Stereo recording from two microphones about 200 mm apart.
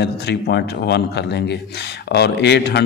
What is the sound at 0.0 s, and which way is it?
A man's voice, 55° left (ahead or behind).